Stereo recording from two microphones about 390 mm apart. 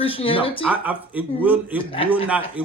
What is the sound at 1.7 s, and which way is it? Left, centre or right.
Speech, centre.